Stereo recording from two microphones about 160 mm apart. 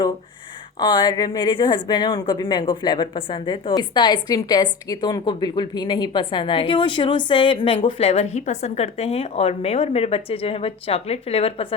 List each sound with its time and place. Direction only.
0.8 s speech: 30° left (ahead or behind)